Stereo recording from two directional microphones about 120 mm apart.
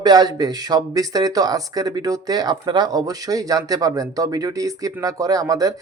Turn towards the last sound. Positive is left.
turn(degrees=-30)  # may be behind; listen again after turning